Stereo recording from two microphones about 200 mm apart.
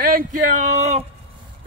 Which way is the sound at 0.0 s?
45° right (ahead or behind).